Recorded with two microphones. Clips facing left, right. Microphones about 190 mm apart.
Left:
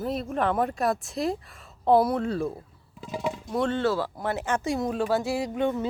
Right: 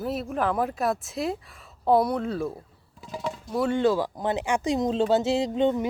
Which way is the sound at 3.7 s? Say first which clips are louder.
Right 3 dB; 15° right (ahead or behind).